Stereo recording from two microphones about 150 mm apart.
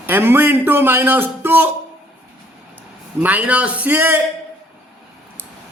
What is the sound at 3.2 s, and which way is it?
A man's voice, 10° right (ahead or behind).